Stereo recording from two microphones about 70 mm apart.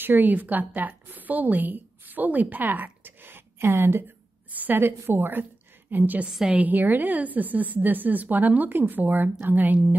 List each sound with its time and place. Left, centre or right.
0.0 s a woman's voice: right
4.5 s a woman's voice: right
6.2 s a woman's voice: centre
6.5 s a woman's voice: right